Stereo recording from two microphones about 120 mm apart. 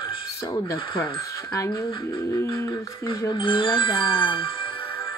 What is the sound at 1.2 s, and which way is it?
Speech, 25° left (ahead or behind).